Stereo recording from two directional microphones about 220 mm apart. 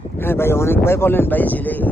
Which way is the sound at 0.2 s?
10° left (ahead or behind).